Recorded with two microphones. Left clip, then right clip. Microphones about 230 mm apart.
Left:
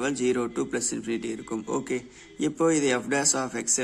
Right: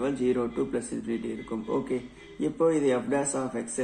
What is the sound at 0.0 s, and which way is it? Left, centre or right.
A man's voice, left.